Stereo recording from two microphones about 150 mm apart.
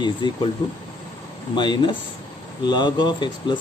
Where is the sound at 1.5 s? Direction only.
30° left (ahead or behind).